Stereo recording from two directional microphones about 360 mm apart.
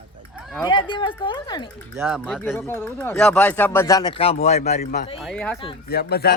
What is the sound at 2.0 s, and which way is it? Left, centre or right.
Speech, centre.